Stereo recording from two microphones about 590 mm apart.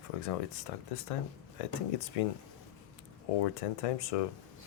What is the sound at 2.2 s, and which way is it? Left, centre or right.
Speech, left.